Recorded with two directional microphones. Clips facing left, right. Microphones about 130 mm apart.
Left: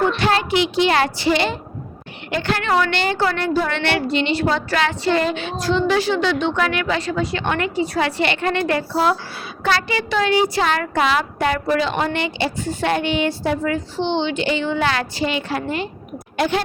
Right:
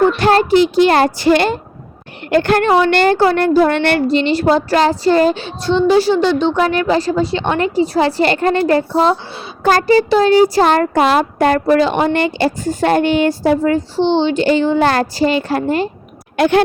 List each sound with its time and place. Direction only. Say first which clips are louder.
0.0 s speech: right 7 dB; 45° right (ahead or behind)
16.4 s speech: right 8 dB; 60° right (ahead or behind)